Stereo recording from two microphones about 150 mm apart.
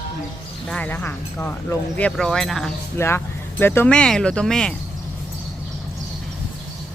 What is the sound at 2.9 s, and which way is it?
Speech, 15° left (ahead or behind).